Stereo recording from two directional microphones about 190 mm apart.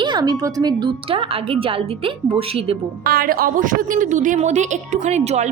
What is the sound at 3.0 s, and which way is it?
A woman's voice, 55° right (ahead or behind).